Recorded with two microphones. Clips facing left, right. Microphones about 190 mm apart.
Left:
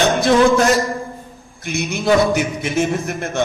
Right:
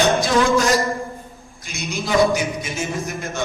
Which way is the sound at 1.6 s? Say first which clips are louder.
Left 6 dB; 60° left (ahead or behind).